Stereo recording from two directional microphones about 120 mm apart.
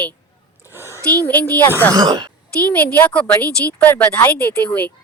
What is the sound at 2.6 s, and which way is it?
Speech, 10° left (ahead or behind).